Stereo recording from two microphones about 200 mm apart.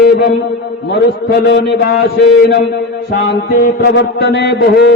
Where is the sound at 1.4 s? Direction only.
60° left (ahead or behind).